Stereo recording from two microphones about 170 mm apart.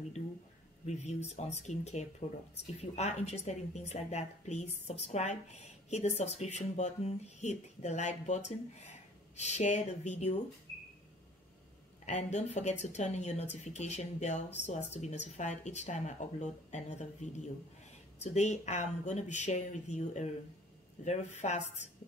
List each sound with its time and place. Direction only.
0.8 s a woman's voice: 40° left (ahead or behind)
12.1 s speech: 40° left (ahead or behind)